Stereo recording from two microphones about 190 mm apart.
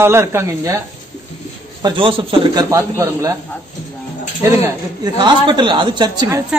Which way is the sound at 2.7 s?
15° right (ahead or behind).